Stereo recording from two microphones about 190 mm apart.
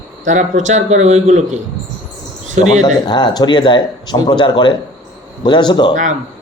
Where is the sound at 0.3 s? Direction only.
40° right (ahead or behind).